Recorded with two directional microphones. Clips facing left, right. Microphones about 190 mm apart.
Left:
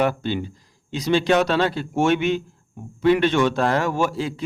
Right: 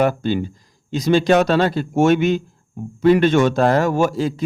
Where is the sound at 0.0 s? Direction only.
45° right (ahead or behind).